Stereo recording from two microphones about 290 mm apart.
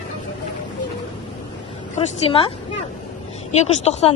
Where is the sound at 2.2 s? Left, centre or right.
Centre.